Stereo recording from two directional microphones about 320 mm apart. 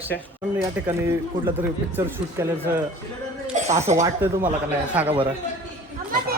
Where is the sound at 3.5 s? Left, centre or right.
Right.